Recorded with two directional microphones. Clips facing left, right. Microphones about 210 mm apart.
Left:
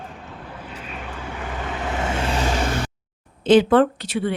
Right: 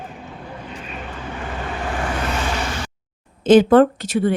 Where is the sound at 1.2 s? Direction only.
20° left (ahead or behind).